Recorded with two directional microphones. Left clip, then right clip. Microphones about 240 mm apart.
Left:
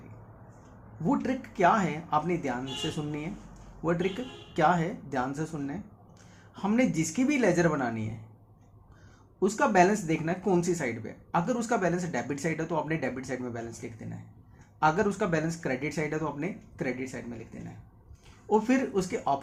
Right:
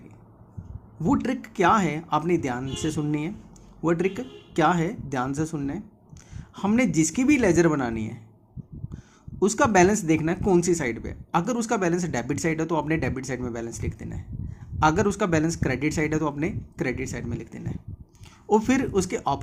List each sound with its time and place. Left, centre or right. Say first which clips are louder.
1.0 s speech: right 4 dB; right
9.4 s speech: right 4 dB; right